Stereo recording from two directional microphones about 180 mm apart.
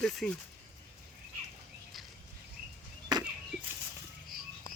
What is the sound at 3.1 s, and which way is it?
Chop, 20° right (ahead or behind).